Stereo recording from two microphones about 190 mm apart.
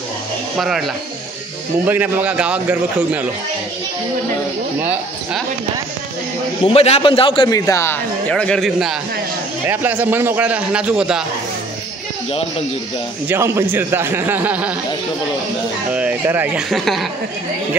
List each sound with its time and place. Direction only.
0.6 s a man's voice: centre (ahead or behind)
6.6 s a man's voice: 30° left (ahead or behind); by 11.2 s 5° right (ahead or behind)
13.3 s a man's voice: 10° right (ahead or behind)
15.9 s a man's voice: 5° right (ahead or behind)